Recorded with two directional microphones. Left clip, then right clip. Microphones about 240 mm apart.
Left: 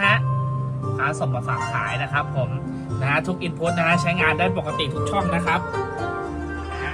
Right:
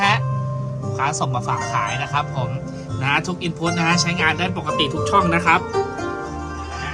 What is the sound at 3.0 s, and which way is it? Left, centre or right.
Speech, right.